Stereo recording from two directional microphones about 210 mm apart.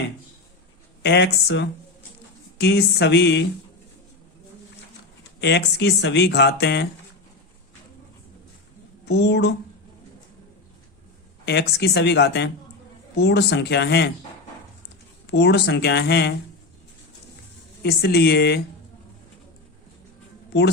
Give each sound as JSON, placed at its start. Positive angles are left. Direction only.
{"t": 1.0, "sound": "speech", "side_deg": 55}
{"t": 5.4, "sound": "speech", "side_deg": 55}
{"t": 9.0, "sound": "speech", "side_deg": 55}
{"t": 11.4, "sound": "speech", "side_deg": 55}
{"t": 15.3, "sound": "speech", "side_deg": 50}
{"t": 17.8, "sound": "speech", "side_deg": 50}
{"t": 20.5, "sound": "a woman's voice", "side_deg": 55}